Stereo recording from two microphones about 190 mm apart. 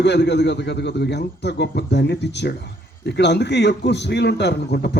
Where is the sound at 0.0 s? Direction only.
65° left (ahead or behind).